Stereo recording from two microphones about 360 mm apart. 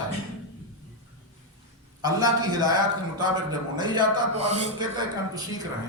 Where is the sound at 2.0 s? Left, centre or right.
Centre.